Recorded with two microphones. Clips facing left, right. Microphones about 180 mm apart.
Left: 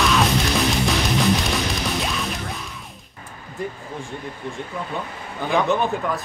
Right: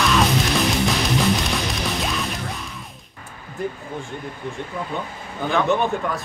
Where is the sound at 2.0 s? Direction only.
Centre (ahead or behind).